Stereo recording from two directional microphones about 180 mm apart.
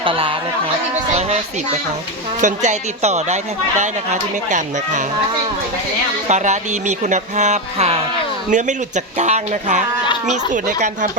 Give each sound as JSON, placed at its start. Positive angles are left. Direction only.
{"t": 0.0, "sound": "speech", "side_deg": -30}
{"t": 2.4, "sound": "a man's voice", "side_deg": -40}
{"t": 6.2, "sound": "a man's voice", "side_deg": -40}